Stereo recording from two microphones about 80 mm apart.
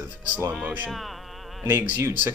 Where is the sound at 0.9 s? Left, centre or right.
Centre.